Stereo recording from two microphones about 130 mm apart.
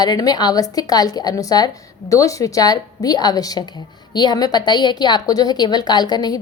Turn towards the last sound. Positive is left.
turn(degrees=30)  # may be behind; listen again after turning